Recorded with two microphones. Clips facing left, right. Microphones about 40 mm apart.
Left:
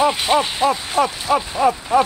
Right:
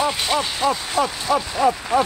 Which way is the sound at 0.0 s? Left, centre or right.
Centre.